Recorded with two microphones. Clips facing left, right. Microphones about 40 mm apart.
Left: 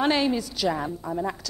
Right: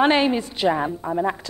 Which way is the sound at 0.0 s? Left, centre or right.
Right.